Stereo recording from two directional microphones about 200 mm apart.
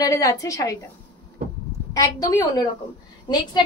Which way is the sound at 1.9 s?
15° left (ahead or behind).